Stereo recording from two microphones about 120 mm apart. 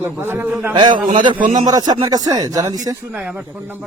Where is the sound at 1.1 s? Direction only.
40° right (ahead or behind).